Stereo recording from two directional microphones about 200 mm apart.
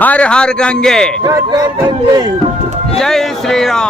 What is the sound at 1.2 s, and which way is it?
Speech, 20° right (ahead or behind).